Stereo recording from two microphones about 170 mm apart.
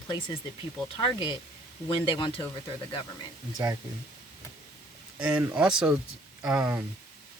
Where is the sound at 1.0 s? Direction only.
25° left (ahead or behind).